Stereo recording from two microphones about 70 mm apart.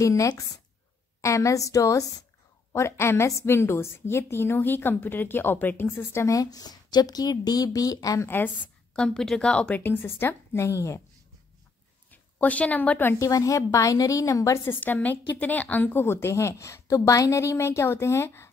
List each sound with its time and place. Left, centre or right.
0.0 s a woman's voice: left
2.7 s a woman's voice: left
6.3 s speech: left
8.2 s a woman's voice: left
8.9 s speech: centre
9.7 s a woman's voice: left
12.1 s a woman's voice: left
13.2 s a woman's voice: left
14.7 s a woman's voice: left